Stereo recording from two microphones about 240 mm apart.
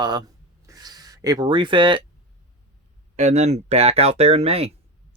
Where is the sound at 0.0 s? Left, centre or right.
Centre.